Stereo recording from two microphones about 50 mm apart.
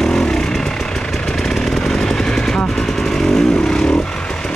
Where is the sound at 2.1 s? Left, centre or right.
Centre.